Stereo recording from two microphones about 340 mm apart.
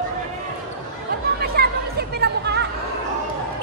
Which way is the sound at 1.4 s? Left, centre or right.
Right.